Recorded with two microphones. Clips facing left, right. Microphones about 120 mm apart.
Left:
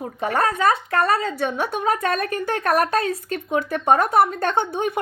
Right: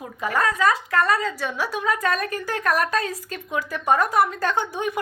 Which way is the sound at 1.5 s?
55° left (ahead or behind).